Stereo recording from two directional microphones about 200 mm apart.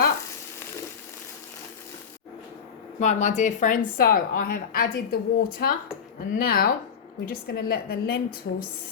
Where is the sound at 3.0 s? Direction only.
35° left (ahead or behind).